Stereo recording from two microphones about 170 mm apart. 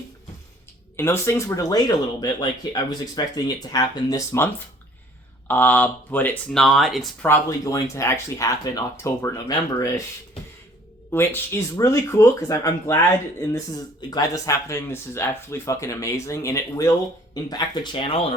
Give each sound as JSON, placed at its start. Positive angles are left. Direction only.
{"t": 0.9, "sound": "speech", "side_deg": 15}
{"t": 7.3, "sound": "speech", "side_deg": 15}
{"t": 11.1, "sound": "speech", "side_deg": 15}
{"t": 14.1, "sound": "speech", "side_deg": 20}